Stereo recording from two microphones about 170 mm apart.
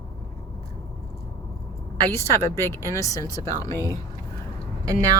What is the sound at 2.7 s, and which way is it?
A woman's voice, 15° left (ahead or behind).